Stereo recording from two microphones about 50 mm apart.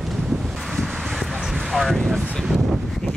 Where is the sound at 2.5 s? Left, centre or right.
Centre.